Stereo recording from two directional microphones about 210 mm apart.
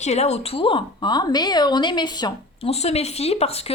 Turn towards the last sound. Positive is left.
turn(degrees=30)  # may be behind; listen again after turning